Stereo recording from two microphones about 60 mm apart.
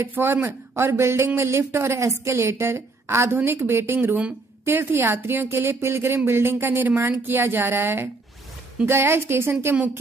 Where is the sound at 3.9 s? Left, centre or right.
Right.